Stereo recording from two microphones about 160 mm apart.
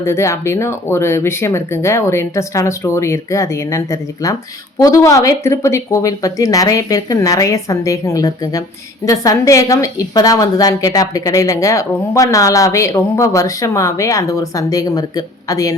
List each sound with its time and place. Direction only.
0.0 s a woman's voice: 15° left (ahead or behind)